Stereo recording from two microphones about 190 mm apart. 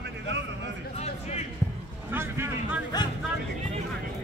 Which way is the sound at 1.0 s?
35° left (ahead or behind).